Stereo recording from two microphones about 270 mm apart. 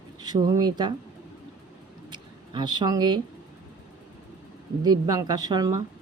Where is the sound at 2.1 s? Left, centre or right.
Centre.